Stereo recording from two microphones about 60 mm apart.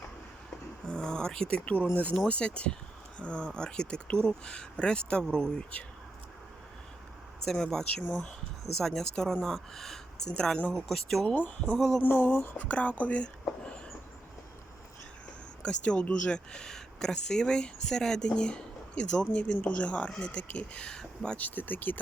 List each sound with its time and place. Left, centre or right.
0.9 s a sound: centre
2.2 s speech: centre
7.4 s speech: centre
11.3 s speech: left
11.8 s speech: centre
12.0 s speech: left
12.5 s speech: left
15.6 s speech: centre
21.3 s speech: left